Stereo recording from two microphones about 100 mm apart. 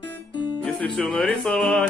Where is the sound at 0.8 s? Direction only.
5° left (ahead or behind).